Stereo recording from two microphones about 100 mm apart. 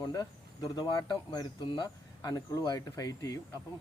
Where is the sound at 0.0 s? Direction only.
40° left (ahead or behind).